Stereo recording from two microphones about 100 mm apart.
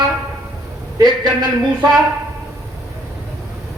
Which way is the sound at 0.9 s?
45° right (ahead or behind).